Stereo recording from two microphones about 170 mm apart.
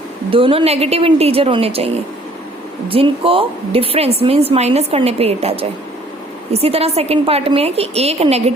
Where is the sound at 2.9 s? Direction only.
30° right (ahead or behind).